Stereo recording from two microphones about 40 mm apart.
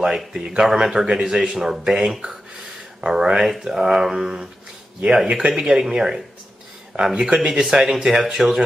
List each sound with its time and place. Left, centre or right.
0.0 s speech: centre